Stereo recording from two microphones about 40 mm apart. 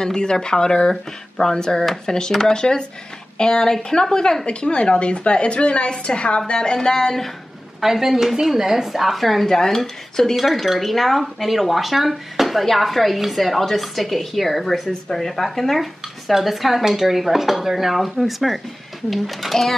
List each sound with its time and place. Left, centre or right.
0.0 s a woman's voice: centre
7.8 s a woman's voice: centre